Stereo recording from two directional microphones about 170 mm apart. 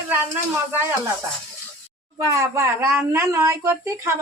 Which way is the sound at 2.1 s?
20° right (ahead or behind).